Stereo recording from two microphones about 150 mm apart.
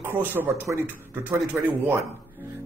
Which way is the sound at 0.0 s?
10° right (ahead or behind).